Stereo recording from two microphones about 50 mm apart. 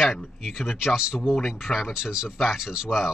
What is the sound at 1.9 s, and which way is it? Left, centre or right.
Speech, centre.